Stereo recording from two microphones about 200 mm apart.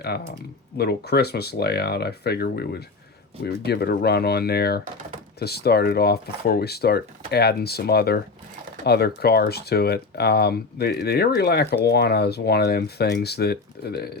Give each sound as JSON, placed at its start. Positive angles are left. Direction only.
{"t": 0.0, "sound": "speech", "side_deg": 55}